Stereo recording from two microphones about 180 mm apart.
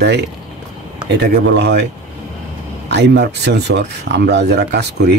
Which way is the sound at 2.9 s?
70° right (ahead or behind).